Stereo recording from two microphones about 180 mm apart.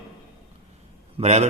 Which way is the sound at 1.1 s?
35° right (ahead or behind).